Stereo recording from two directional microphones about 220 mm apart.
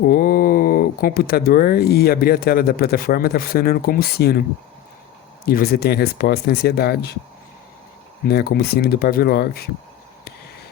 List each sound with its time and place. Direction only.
0.0 s speech: 40° left (ahead or behind)
5.5 s speech: 45° left (ahead or behind)
8.3 s speech: 45° left (ahead or behind)